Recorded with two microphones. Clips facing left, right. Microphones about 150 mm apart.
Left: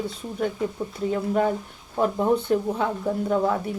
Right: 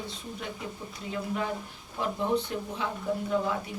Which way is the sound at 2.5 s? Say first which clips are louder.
Left 12 dB; 45° left (ahead or behind).